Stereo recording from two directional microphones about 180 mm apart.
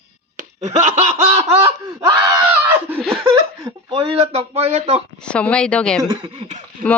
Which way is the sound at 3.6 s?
20° right (ahead or behind).